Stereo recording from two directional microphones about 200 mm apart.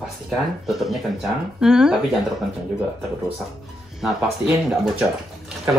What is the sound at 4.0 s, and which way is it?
Speech, centre (ahead or behind).